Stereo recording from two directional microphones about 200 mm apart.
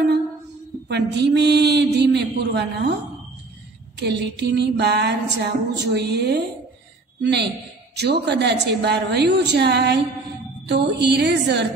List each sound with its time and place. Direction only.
0.8 s speech: 60° right (ahead or behind)
4.0 s a man's voice: 55° right (ahead or behind)